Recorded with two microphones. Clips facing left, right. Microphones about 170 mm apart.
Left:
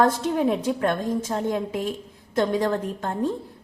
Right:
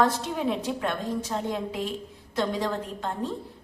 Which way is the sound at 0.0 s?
45° left (ahead or behind).